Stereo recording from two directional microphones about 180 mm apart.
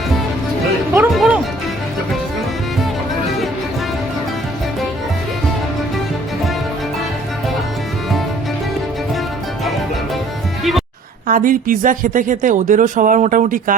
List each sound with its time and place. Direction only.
1.1 s music: centre (ahead or behind)
10.6 s music: centre (ahead or behind)
11.3 s a woman's voice: 50° right (ahead or behind)